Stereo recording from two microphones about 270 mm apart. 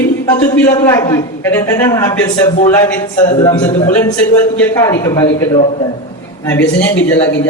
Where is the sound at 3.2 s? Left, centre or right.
Left.